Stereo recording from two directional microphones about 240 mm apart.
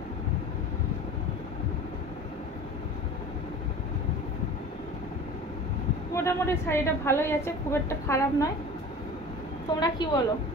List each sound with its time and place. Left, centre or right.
6.1 s a woman's voice: centre
9.8 s a woman's voice: centre